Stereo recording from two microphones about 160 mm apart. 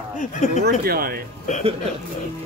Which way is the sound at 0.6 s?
70° right (ahead or behind).